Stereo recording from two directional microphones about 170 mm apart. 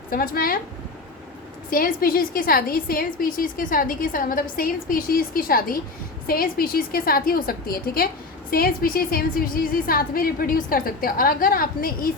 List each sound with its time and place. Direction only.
0.1 s a woman's voice: 60° left (ahead or behind)
1.7 s a woman's voice: 55° left (ahead or behind)